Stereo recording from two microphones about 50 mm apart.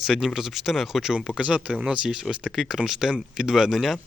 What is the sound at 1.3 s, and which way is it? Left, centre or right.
Speech, right.